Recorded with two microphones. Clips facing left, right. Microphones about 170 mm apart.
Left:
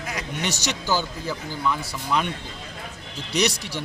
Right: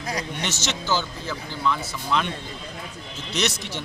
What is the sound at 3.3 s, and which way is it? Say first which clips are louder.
Speech: left 3 dB; 10° left (ahead or behind).